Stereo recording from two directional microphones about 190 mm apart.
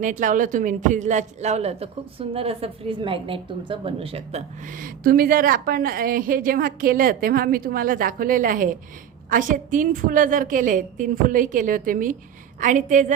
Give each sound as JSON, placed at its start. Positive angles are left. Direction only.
{"t": 0.0, "sound": "speech", "side_deg": -40}